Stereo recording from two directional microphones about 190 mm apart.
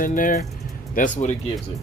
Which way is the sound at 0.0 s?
45° left (ahead or behind).